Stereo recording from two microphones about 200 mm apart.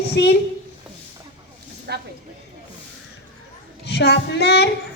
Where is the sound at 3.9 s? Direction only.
60° left (ahead or behind).